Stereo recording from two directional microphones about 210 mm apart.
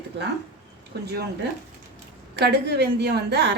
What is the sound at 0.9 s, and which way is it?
Speech, 50° right (ahead or behind).